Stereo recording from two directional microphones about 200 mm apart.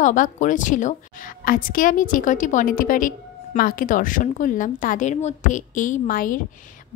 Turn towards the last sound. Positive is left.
turn(degrees=45)  # may be behind; listen again after turning